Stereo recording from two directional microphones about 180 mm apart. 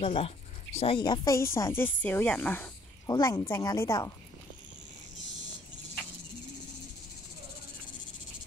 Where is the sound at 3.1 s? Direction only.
20° left (ahead or behind).